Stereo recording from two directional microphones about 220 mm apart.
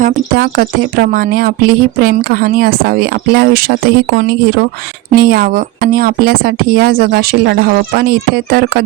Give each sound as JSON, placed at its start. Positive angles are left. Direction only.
{"t": 0.0, "sound": "speech", "side_deg": -45}